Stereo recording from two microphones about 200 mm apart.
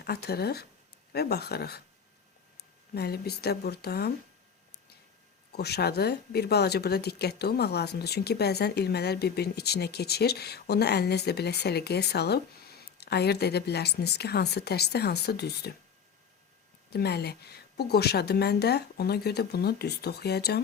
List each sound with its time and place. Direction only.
0.0 s speech: 55° left (ahead or behind)
2.9 s speech: 55° left (ahead or behind)
5.5 s speech: 55° left (ahead or behind)
16.9 s speech: 55° left (ahead or behind)